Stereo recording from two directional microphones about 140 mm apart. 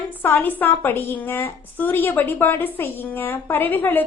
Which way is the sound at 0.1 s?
15° left (ahead or behind).